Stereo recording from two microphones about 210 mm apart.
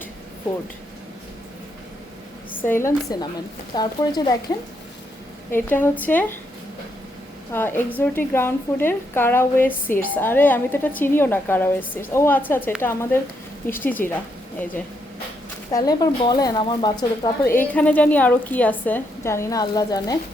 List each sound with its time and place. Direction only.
2.6 s speech: 10° left (ahead or behind)
5.5 s speech: 10° left (ahead or behind)
7.5 s speech: 10° left (ahead or behind)
15.7 s speech: 20° left (ahead or behind)